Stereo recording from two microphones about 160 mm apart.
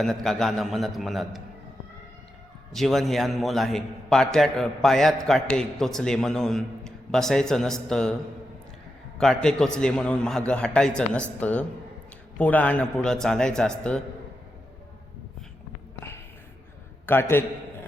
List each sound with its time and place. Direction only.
0.0 s a man's voice: centre (ahead or behind)
2.7 s a man's voice: centre (ahead or behind)
9.1 s a man's voice: centre (ahead or behind)
17.1 s a man's voice: 15° left (ahead or behind)